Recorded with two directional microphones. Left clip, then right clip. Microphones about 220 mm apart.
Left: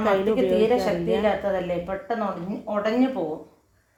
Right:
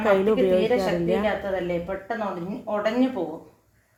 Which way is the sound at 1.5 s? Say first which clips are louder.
Left 1 dB; 25° left (ahead or behind).